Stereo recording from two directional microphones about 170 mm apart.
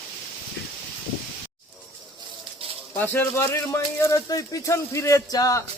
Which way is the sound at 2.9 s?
10° left (ahead or behind).